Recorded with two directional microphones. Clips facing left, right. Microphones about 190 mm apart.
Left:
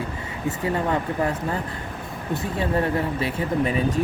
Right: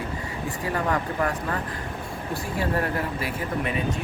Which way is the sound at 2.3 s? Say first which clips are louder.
Left 3 dB; 25° left (ahead or behind).